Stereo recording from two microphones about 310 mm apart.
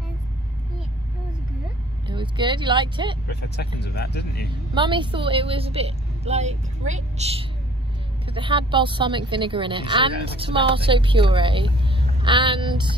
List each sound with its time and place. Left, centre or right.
2.0 s speech: centre
3.3 s speech: left
4.7 s a woman's voice: centre